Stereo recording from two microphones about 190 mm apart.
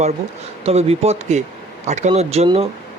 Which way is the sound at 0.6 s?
35° right (ahead or behind).